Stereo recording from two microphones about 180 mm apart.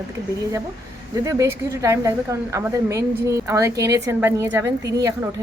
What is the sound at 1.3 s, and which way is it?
A woman's voice, 15° right (ahead or behind).